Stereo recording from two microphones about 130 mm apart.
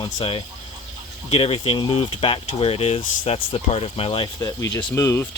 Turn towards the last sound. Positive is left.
turn(degrees=20)  # may be behind; listen again after turning